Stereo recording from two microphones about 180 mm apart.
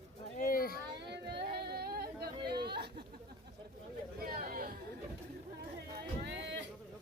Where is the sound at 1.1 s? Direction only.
65° right (ahead or behind).